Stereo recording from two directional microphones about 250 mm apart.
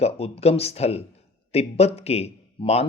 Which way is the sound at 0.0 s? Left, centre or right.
Left.